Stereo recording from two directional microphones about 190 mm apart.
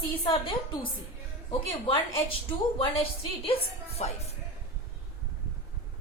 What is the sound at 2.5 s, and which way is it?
A woman's voice, 30° left (ahead or behind).